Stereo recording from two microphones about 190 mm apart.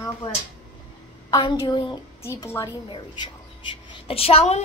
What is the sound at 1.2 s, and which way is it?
A woman's voice, 20° left (ahead or behind).